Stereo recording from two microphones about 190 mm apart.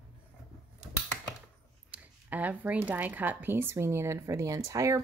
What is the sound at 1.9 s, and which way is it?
Speech, 10° right (ahead or behind).